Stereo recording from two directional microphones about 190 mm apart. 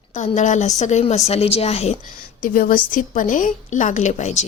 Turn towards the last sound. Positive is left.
turn(degrees=40)  # may be behind; listen again after turning